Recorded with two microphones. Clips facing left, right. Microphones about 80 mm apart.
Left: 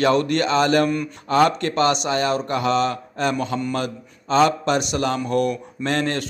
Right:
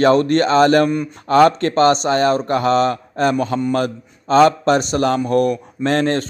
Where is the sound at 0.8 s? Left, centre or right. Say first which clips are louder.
Right 3 dB; right.